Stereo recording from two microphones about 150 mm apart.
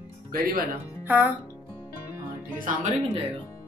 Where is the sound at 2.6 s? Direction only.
60° right (ahead or behind).